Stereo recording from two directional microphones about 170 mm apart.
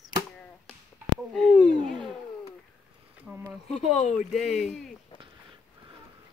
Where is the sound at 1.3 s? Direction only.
Centre (ahead or behind).